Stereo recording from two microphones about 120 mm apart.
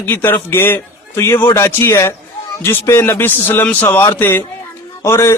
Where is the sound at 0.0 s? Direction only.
15° left (ahead or behind).